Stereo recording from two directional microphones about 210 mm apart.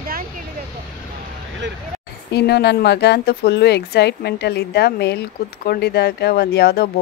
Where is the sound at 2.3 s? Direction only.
50° left (ahead or behind).